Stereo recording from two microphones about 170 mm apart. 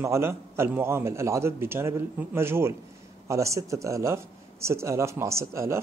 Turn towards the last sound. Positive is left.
turn(degrees=-15)  # may be behind; listen again after turning